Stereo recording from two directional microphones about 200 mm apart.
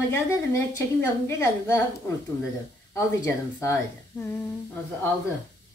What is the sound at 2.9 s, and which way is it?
A woman's voice, 15° left (ahead or behind).